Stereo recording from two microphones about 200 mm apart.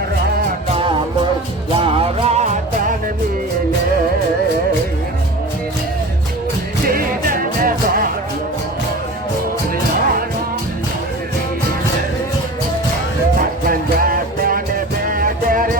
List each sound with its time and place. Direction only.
0.8 s music: 25° right (ahead or behind)
6.8 s music: 45° right (ahead or behind)
13.7 s music: 45° right (ahead or behind)